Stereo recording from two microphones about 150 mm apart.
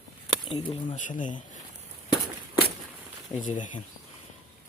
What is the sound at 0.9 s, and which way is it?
Speech, 60° left (ahead or behind).